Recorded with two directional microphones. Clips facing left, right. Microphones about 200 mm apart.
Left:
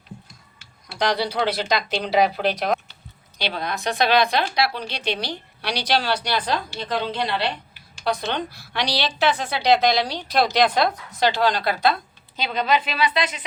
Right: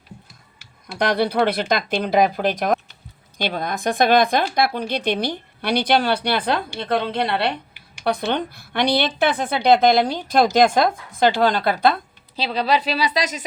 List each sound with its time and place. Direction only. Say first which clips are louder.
0.9 s speech: right 4 dB; 55° right (ahead or behind)
12.4 s a woman's voice: right 2 dB; 35° right (ahead or behind)